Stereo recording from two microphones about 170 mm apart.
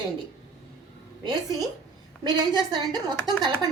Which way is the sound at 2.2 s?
25° right (ahead or behind).